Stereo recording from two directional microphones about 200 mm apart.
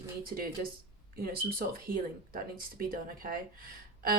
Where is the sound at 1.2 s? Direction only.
50° right (ahead or behind).